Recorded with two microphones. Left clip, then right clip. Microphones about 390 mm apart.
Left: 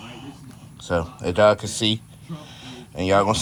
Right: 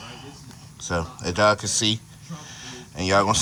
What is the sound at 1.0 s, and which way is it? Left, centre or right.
Speech, centre.